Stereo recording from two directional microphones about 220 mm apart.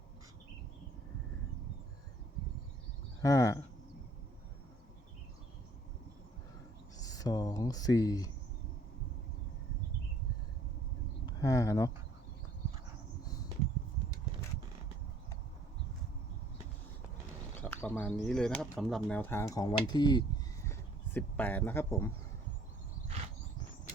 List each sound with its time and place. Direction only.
3.2 s speech: 15° left (ahead or behind)
7.0 s speech: 15° left (ahead or behind)
11.3 s speech: 15° left (ahead or behind)
17.6 s speech: 10° left (ahead or behind)